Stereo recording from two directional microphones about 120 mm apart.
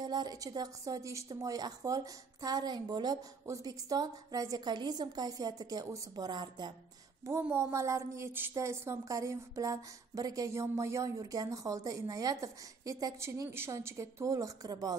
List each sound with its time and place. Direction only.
0.0 s a woman's voice: 35° right (ahead or behind)
7.2 s a woman's voice: 20° right (ahead or behind)